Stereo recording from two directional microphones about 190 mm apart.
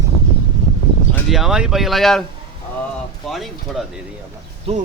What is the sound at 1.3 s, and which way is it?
Speech, centre (ahead or behind).